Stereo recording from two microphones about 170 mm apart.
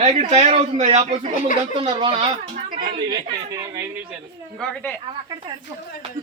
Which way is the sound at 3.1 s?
20° right (ahead or behind).